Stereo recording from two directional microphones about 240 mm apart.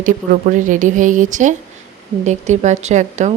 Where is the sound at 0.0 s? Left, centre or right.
Right.